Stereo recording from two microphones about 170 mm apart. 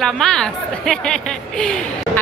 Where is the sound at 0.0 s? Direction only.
5° left (ahead or behind).